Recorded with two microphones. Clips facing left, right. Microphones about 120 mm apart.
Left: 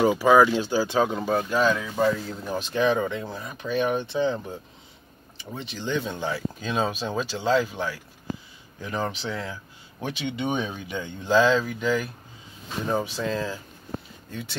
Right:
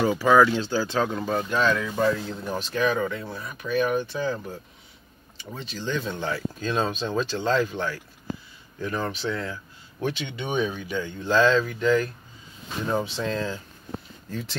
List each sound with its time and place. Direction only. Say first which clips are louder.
0.0 s speech: left 1 dB; 15° left (ahead or behind)